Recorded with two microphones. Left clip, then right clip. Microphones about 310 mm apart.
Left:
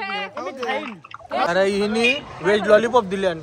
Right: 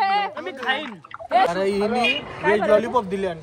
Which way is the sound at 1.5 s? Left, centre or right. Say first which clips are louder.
Left 2 dB; left.